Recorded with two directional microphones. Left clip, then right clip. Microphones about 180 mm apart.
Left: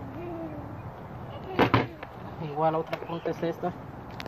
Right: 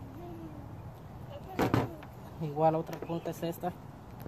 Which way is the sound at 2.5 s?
45° right (ahead or behind).